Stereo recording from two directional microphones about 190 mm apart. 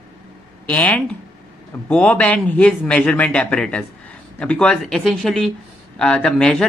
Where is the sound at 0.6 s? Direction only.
10° left (ahead or behind).